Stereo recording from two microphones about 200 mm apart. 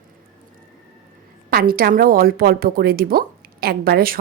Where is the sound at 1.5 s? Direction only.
50° right (ahead or behind).